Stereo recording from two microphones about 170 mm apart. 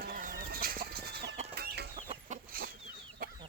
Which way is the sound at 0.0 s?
55° right (ahead or behind).